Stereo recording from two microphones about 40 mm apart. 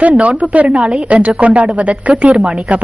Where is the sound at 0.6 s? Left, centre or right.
Right.